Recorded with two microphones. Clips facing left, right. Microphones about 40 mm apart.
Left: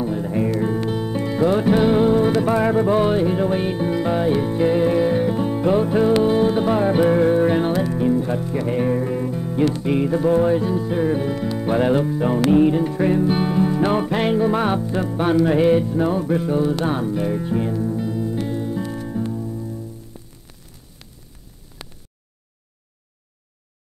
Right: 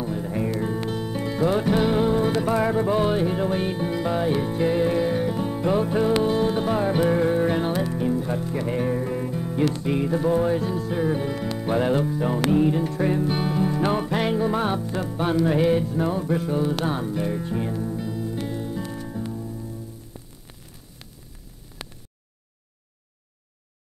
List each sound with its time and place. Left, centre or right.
0.0 s music: centre
14.5 s music: left
15.5 s music: centre